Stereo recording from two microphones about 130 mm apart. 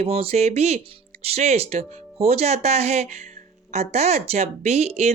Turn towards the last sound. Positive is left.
turn(degrees=-55)  # may be behind; listen again after turning